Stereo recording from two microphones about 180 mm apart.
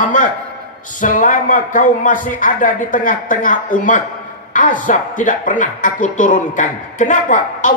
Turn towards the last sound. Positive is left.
turn(degrees=45)  # may be behind; listen again after turning